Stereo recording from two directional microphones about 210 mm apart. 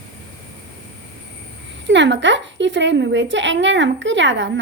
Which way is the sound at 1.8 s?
60° right (ahead or behind).